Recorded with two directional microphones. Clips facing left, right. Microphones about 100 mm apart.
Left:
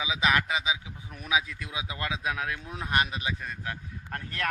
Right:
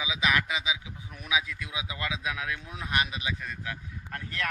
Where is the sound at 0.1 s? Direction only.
35° left (ahead or behind).